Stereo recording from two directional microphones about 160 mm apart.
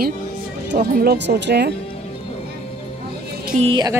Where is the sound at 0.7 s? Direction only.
75° right (ahead or behind).